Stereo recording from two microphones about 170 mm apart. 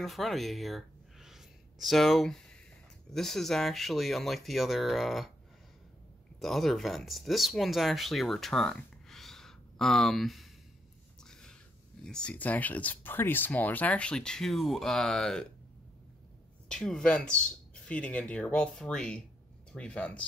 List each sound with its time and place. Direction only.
0.0 s speech: centre (ahead or behind)
6.4 s speech: centre (ahead or behind)
12.0 s speech: 5° left (ahead or behind)
16.6 s speech: 5° left (ahead or behind)